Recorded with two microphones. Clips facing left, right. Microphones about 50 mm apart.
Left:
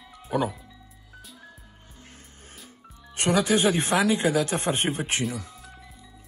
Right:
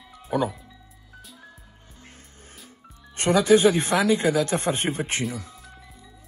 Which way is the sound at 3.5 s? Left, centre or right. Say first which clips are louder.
Right 4 dB; left.